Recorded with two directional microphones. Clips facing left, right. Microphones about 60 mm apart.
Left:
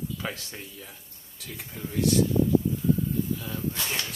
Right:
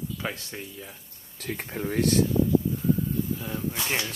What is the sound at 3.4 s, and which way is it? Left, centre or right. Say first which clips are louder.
Speech: right 1 dB; centre.